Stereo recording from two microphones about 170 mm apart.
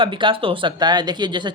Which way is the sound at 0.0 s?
30° right (ahead or behind).